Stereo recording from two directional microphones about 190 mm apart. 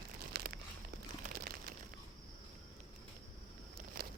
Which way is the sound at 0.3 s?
55° right (ahead or behind).